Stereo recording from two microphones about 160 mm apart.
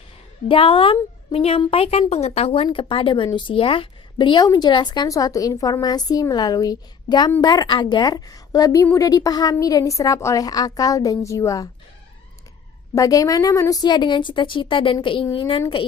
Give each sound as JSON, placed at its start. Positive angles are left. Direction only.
{"t": 0.4, "sound": "a woman's voice", "side_deg": 35}
{"t": 12.9, "sound": "a woman's voice", "side_deg": 20}